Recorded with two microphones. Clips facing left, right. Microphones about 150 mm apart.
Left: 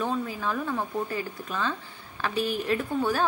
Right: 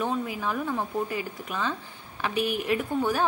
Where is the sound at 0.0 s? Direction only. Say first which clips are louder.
Even; 15° right (ahead or behind).